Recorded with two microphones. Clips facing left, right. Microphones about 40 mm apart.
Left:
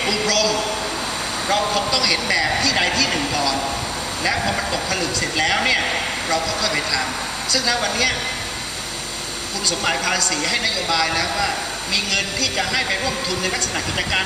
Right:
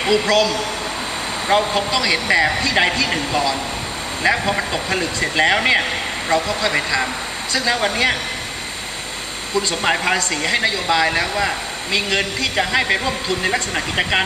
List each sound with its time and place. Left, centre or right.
0.0 s speech: right
9.5 s speech: right